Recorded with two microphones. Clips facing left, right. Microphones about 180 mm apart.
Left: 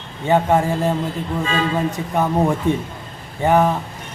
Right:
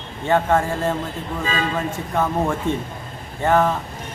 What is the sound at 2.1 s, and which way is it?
Speech, 15° left (ahead or behind).